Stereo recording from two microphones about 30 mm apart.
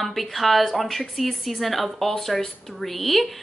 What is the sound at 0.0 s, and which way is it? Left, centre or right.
A woman's voice, centre.